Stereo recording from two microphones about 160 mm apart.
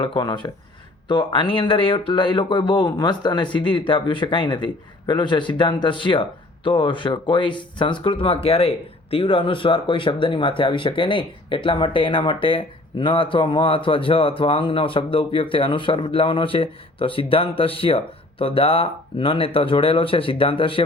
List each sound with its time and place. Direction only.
0.0 s speech: 30° left (ahead or behind)